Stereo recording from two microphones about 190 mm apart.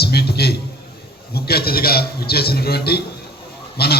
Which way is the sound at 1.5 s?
55° left (ahead or behind).